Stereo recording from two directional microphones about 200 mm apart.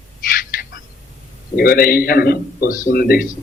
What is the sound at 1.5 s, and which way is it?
A man's voice, 50° left (ahead or behind).